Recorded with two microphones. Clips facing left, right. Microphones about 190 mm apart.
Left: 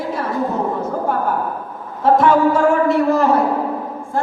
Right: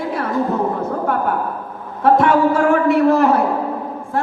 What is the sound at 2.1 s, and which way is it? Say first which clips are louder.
Speech: left 2 dB; 60° right (ahead or behind).